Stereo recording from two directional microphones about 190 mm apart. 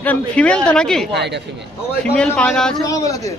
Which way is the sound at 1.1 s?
65° right (ahead or behind).